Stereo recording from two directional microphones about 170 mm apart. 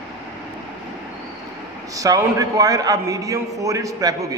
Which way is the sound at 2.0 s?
20° right (ahead or behind).